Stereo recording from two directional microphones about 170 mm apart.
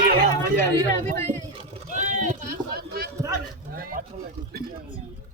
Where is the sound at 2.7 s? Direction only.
65° right (ahead or behind).